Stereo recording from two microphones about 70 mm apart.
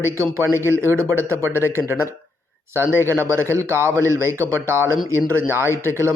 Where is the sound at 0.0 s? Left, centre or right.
Right.